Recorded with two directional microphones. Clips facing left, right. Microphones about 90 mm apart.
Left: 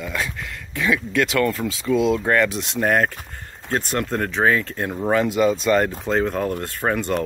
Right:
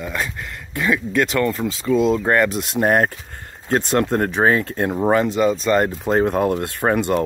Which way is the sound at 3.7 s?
20° right (ahead or behind).